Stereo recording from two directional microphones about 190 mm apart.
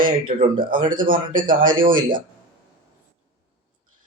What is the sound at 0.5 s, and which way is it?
Speech, 45° right (ahead or behind).